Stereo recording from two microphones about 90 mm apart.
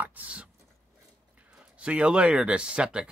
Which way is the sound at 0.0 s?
15° right (ahead or behind).